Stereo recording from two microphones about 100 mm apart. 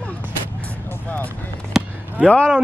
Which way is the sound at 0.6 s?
20° left (ahead or behind).